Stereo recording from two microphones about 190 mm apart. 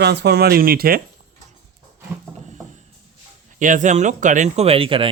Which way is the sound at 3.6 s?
40° right (ahead or behind).